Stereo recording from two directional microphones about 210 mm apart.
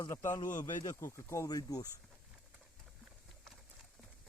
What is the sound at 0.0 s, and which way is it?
Speech, 15° left (ahead or behind).